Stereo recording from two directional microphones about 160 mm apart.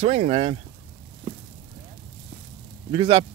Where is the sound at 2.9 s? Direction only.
35° right (ahead or behind).